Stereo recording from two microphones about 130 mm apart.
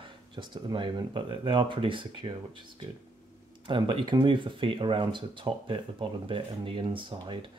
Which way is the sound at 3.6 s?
40° right (ahead or behind).